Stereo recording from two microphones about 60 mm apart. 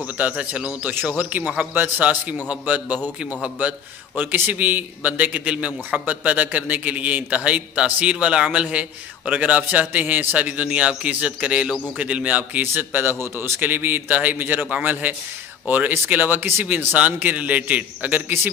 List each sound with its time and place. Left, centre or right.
0.0 s a man's voice: right